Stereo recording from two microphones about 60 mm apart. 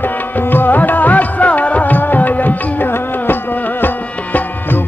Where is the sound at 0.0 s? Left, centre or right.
Left.